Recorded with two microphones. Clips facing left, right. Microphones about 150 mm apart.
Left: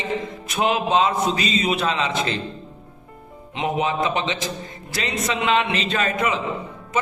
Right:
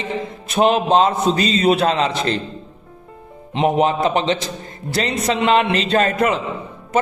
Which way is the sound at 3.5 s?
35° right (ahead or behind).